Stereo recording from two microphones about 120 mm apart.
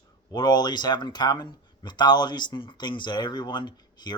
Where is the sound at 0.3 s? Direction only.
35° left (ahead or behind).